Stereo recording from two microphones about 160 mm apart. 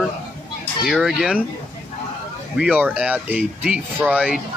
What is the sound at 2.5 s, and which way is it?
Speech, 5° right (ahead or behind).